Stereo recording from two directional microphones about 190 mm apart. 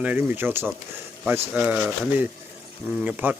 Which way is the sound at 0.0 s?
10° right (ahead or behind).